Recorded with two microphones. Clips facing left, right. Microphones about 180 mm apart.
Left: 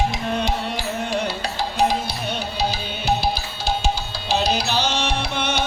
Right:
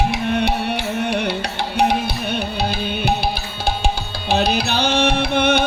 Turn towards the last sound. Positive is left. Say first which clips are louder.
# right 7 dB
turn(degrees=-55)  # may be behind; listen again after turning